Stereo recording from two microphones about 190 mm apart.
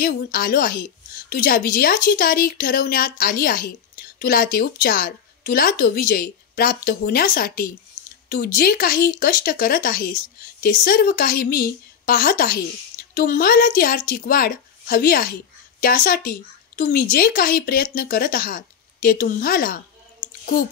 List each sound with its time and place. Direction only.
0.0 s a woman's voice: 50° left (ahead or behind)